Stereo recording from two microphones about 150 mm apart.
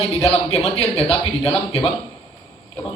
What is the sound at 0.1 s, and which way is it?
Speech, 45° left (ahead or behind).